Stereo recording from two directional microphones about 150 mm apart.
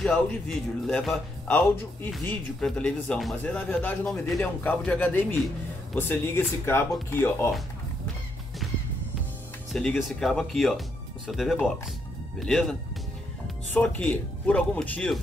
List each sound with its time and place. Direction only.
0.0 s speech: centre (ahead or behind)
2.2 s speech: 5° left (ahead or behind)
9.7 s speech: centre (ahead or behind)
13.7 s speech: 5° left (ahead or behind)